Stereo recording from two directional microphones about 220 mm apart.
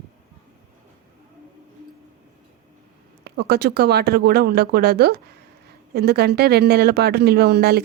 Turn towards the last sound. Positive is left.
turn(degrees=-45)  # may be behind; listen again after turning